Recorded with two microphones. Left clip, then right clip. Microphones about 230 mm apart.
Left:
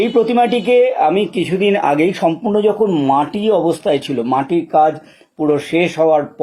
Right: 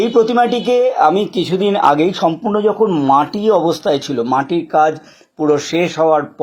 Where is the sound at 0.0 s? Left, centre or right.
Right.